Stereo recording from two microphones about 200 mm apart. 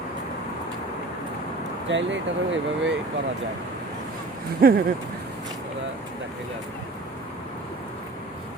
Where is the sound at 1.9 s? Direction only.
65° right (ahead or behind).